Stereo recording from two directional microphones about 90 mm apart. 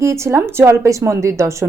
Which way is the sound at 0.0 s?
30° right (ahead or behind).